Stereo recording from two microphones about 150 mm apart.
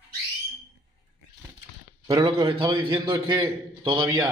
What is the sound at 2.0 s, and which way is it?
Speech, 25° right (ahead or behind).